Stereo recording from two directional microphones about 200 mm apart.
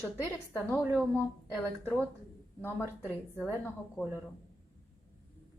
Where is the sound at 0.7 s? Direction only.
10° right (ahead or behind).